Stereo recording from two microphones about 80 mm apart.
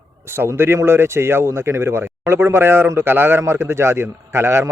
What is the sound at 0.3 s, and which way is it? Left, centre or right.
Speech, right.